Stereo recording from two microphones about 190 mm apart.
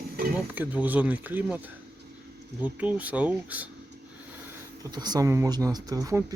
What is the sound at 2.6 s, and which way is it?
Speech, 10° right (ahead or behind).